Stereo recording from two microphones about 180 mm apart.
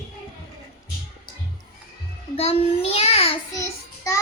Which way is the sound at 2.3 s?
35° left (ahead or behind).